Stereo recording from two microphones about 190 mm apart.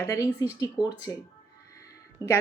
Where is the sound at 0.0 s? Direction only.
15° left (ahead or behind).